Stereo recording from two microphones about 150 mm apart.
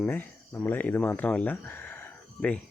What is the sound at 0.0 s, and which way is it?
Speech, 10° left (ahead or behind).